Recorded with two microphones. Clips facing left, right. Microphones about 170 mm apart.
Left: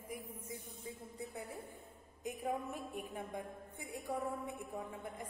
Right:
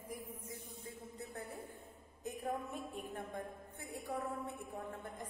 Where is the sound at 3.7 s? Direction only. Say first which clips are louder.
Left 2 dB; 15° left (ahead or behind).